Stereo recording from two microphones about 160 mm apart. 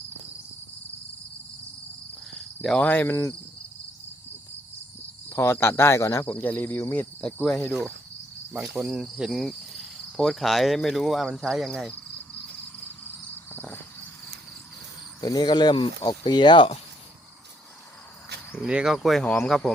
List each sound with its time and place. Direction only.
2.6 s speech: 5° left (ahead or behind)
5.3 s speech: 15° left (ahead or behind)
8.5 s speech: centre (ahead or behind)
13.5 s a sound: 15° left (ahead or behind)
15.2 s speech: 25° left (ahead or behind)
18.6 s speech: 5° right (ahead or behind)